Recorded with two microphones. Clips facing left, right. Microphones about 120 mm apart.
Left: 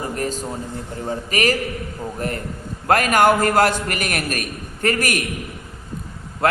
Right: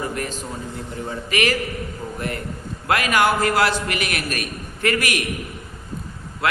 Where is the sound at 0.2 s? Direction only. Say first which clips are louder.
Left 3 dB; 40° left (ahead or behind).